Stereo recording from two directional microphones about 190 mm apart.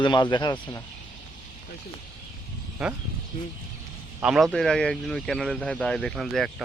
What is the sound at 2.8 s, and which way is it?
Speech, centre (ahead or behind).